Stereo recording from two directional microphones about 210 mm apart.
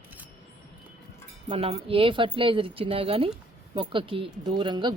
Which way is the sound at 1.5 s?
25° right (ahead or behind).